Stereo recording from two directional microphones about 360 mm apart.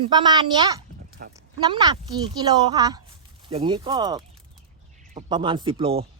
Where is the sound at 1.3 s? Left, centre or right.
Centre.